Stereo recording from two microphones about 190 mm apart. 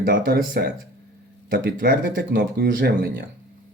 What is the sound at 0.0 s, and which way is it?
Speech, 50° right (ahead or behind).